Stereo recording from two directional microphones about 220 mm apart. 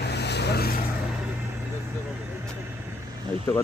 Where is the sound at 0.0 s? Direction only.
50° left (ahead or behind).